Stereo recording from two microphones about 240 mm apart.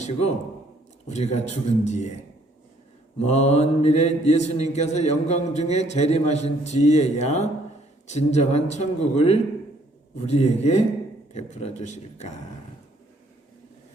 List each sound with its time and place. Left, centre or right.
0.0 s a man's voice: left
1.0 s mantra: left
3.2 s mantra: left